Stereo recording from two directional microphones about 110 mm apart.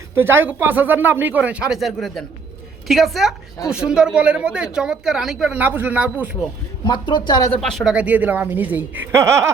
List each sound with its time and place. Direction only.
0.1 s a woman's voice: 20° right (ahead or behind); by 5.5 s 5° right (ahead or behind)
5.5 s speech: 15° right (ahead or behind)
6.8 s speech: 45° left (ahead or behind)
7.5 s a woman's voice: 5° left (ahead or behind)
7.9 s speech: 15° right (ahead or behind)